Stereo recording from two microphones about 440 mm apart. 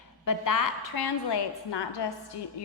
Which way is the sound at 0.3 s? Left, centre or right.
Left.